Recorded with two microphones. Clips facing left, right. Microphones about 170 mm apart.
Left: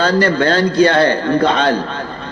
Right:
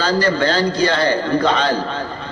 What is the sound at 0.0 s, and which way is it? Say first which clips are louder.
A man's voice: left 3 dB; 55° left (ahead or behind).